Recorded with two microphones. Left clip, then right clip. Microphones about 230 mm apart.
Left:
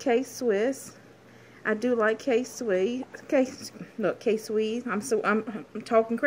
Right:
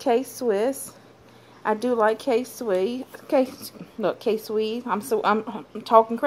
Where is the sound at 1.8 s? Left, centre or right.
Right.